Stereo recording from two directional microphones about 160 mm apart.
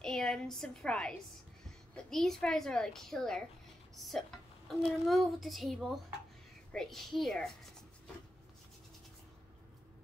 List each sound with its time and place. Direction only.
0.0 s a woman's voice: 5° left (ahead or behind)
4.6 s a child's voice: centre (ahead or behind)